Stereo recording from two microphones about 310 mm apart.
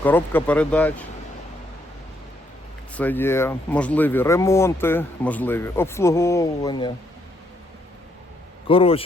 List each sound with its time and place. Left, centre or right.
0.0 s speech: centre
2.9 s speech: centre
8.6 s speech: centre